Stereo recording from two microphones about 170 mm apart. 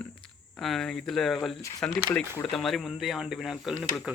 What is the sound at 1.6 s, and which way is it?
Speech, 20° left (ahead or behind).